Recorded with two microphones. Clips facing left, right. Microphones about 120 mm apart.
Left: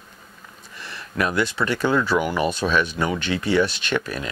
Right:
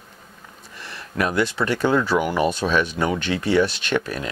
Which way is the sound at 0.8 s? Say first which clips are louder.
Right 1 dB; 40° right (ahead or behind).